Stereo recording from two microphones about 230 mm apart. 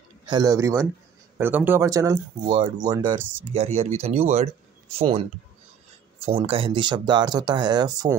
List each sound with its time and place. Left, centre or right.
0.3 s speech: centre
3.2 s speech: centre
3.5 s speech: right
6.2 s speech: right